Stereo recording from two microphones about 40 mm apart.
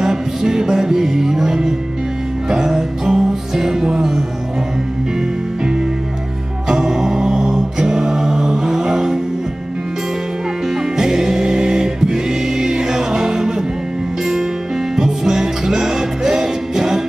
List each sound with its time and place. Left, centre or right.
0.0 s music: centre
6.7 s mantra: centre
10.7 s music: centre
15.0 s music: centre